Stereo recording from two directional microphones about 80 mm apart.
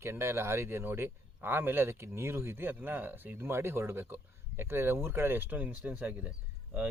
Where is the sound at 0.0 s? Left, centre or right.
Right.